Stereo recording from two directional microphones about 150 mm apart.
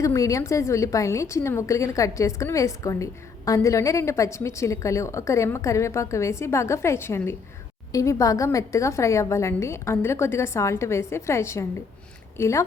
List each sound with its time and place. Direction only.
0.0 s a woman's voice: 20° left (ahead or behind)